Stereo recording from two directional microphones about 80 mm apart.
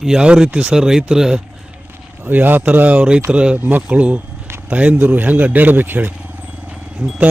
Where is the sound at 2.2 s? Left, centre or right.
Right.